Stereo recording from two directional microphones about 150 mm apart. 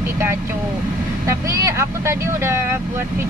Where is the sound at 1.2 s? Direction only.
20° right (ahead or behind).